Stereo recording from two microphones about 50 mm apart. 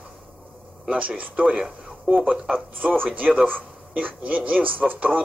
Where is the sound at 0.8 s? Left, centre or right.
Right.